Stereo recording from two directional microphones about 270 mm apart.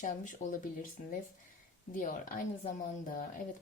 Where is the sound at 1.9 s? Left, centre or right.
Left.